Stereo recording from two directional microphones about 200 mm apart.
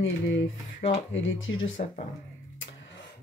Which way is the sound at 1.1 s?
70° left (ahead or behind).